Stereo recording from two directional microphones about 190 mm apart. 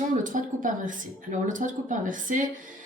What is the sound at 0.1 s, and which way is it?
Speech, 45° right (ahead or behind).